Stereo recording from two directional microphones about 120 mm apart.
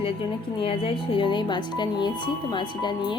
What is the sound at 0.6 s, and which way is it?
Speech, 50° left (ahead or behind).